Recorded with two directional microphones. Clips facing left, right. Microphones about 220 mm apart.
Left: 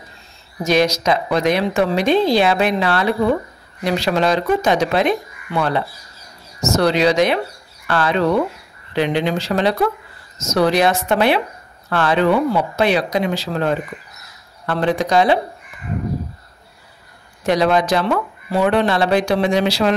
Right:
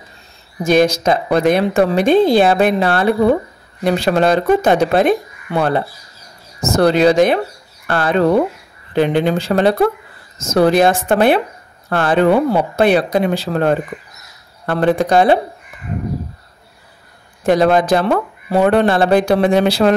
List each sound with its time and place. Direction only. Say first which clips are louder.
0.7 s speech: right 3 dB; 50° right (ahead or behind)
17.4 s speech: right 4 dB; 50° right (ahead or behind)